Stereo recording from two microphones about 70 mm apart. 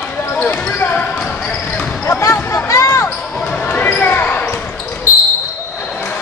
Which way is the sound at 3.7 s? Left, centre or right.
Left.